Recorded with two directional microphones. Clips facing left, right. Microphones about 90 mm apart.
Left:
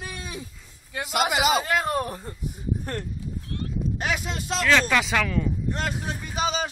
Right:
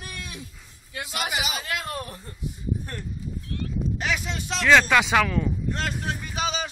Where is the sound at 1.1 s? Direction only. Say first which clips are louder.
Left 8 dB; 90° left.